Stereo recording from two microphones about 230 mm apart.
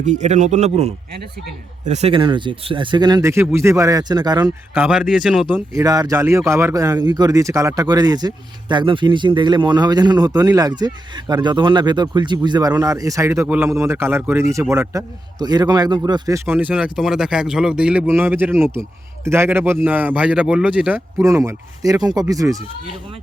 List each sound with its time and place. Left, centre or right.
0.0 s a man's voice: right
4.7 s a man's voice: centre